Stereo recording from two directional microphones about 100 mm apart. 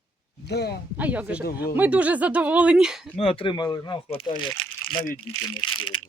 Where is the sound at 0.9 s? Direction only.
15° right (ahead or behind).